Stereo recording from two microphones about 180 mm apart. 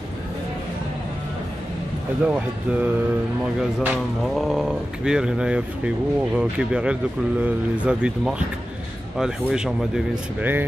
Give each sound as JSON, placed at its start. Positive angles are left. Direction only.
{"t": 2.2, "sound": "speech", "side_deg": -10}